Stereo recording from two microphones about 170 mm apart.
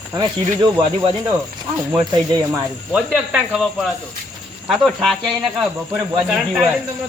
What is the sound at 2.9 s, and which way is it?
Speech, 5° right (ahead or behind).